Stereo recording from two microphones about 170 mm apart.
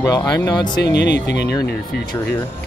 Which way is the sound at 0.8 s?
80° left.